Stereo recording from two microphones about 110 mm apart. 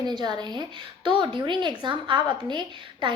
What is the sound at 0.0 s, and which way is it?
A woman's voice, 40° right (ahead or behind).